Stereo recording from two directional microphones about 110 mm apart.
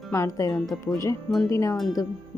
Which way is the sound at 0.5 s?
Centre (ahead or behind).